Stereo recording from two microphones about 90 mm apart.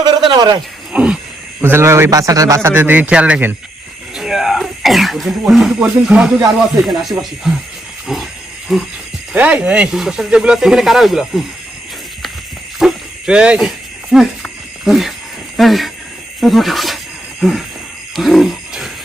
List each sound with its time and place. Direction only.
0.3 s a man's voice: 50° right (ahead or behind)
0.9 s wild animals: 10° right (ahead or behind)
1.6 s a man's voice: 30° right (ahead or behind)
2.6 s speech: 25° right (ahead or behind)
4.1 s throat clearing: 5° right (ahead or behind)
5.8 s speech: 10° right (ahead or behind)
8.0 s roaring cats: 5° right (ahead or behind)
9.3 s speech: 15° right (ahead or behind)
12.8 s a sound: 10° right (ahead or behind)
14.8 s speech: 5° right (ahead or behind)
18.2 s a sound: centre (ahead or behind)